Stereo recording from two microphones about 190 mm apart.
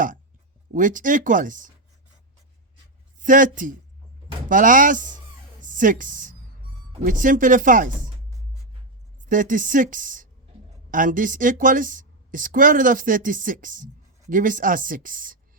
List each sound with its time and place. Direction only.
0.7 s a woman's voice: 45° right (ahead or behind)
3.2 s a woman's voice: 45° right (ahead or behind)
9.2 s a woman's voice: 45° right (ahead or behind)